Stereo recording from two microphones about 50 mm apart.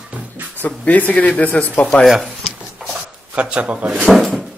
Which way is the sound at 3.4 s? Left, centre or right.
Right.